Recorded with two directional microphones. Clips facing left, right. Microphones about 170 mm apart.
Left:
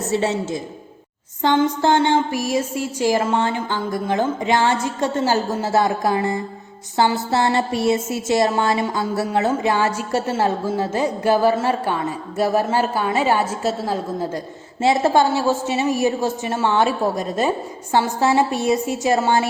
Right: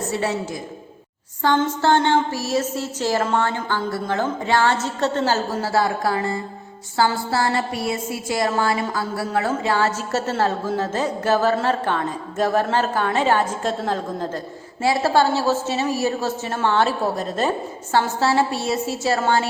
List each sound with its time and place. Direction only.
0.1 s a woman's voice: 25° left (ahead or behind)
14.8 s a woman's voice: 20° left (ahead or behind)